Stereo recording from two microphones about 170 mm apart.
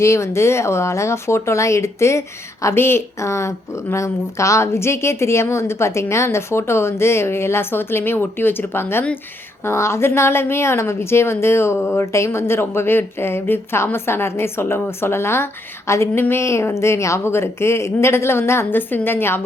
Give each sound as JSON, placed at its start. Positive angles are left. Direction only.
{"t": 0.0, "sound": "speech", "side_deg": 15}